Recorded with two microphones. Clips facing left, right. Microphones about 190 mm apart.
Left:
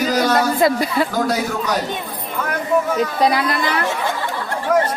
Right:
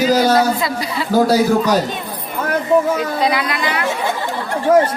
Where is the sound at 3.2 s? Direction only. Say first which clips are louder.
Left 1 dB; 40° left (ahead or behind).